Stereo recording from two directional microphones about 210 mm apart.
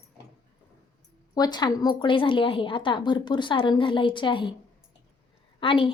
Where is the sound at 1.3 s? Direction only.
20° left (ahead or behind).